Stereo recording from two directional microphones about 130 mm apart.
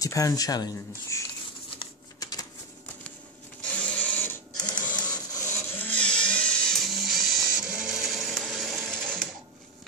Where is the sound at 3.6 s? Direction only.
10° left (ahead or behind).